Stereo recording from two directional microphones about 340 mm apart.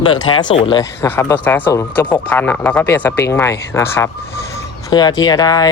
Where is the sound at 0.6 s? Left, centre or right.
Centre.